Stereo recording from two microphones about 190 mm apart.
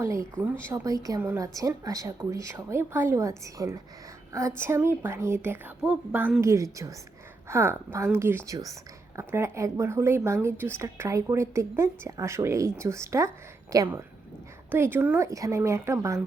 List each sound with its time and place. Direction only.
0.0 s a woman's voice: 15° right (ahead or behind)